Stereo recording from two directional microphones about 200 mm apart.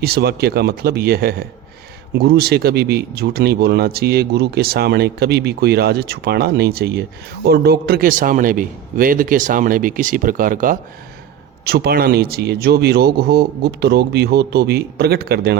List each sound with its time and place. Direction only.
0.0 s speech: 50° right (ahead or behind)